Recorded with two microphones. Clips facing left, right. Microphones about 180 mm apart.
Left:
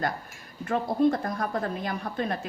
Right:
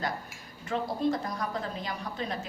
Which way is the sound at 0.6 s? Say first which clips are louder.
Left 6 dB; 55° left (ahead or behind).